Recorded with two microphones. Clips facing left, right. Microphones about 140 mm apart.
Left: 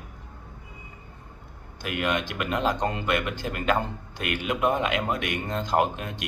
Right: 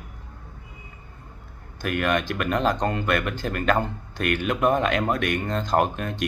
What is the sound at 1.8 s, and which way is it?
A man's voice, 15° left (ahead or behind).